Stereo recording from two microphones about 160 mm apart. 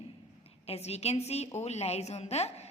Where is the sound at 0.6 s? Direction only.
40° left (ahead or behind).